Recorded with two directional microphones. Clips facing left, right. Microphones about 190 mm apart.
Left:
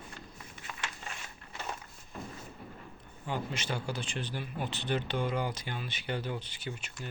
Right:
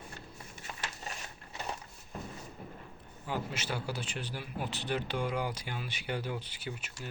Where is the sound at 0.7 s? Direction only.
40° right (ahead or behind).